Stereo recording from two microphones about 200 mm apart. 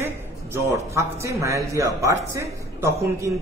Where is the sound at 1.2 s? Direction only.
15° right (ahead or behind).